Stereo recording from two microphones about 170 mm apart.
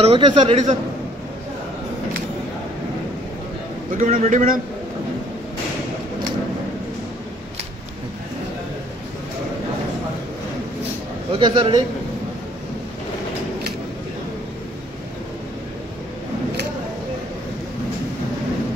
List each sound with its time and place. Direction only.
0.0 s a man's voice: 35° right (ahead or behind)
3.9 s a man's voice: 50° right (ahead or behind)
11.3 s a man's voice: 30° right (ahead or behind)